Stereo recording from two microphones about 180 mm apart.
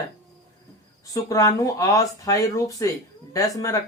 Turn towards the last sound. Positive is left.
turn(degrees=20)  # may be behind; listen again after turning